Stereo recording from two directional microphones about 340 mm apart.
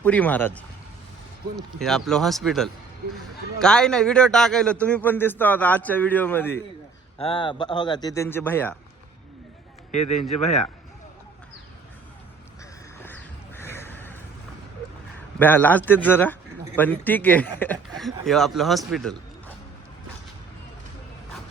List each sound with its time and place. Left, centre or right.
0.0 s a man's voice: centre
1.8 s a man's voice: centre
9.9 s a man's voice: centre
13.0 s a sound: centre
15.4 s a man's voice: centre